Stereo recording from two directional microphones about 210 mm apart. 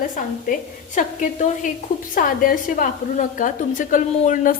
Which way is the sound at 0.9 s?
35° left (ahead or behind).